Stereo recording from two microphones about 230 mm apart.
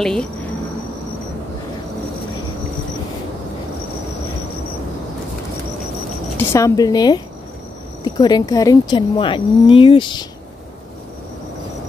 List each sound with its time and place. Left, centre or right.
0.0 s speech: centre
6.3 s speech: centre